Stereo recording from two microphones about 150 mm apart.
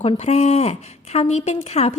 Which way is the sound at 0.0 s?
40° left (ahead or behind).